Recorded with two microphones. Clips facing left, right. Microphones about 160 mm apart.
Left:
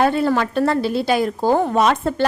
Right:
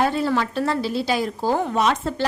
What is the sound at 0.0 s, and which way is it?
A woman's voice, 55° left (ahead or behind).